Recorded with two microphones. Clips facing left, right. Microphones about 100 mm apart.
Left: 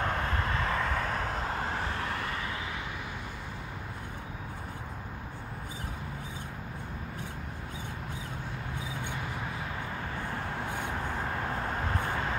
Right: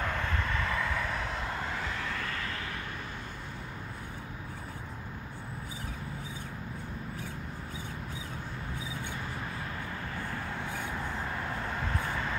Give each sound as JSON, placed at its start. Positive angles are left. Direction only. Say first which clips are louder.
{"t": 0.0, "sound": "vehicle", "louder": "left 2 dB", "side_deg": 35}
{"t": 10.6, "sound": "a sound", "louder": "left 2 dB", "side_deg": 20}
{"t": 11.4, "sound": "vehicle", "louder": "left 2 dB", "side_deg": 35}